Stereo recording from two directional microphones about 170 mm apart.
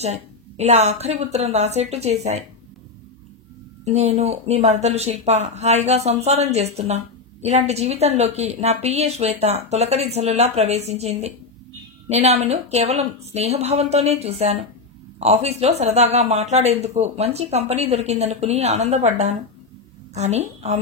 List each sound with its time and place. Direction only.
0.0 s speech: 40° right (ahead or behind)
3.8 s speech: 40° right (ahead or behind)